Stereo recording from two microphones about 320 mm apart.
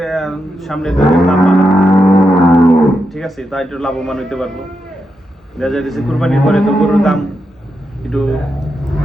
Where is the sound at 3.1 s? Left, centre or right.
Centre.